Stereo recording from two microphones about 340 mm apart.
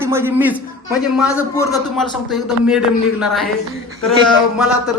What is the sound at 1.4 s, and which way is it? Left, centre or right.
A man's voice, centre.